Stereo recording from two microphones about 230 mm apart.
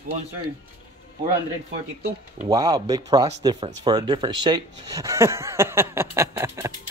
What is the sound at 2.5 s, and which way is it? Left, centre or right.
Speech, centre.